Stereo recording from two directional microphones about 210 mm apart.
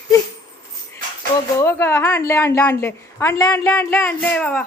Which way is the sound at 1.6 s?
10° left (ahead or behind).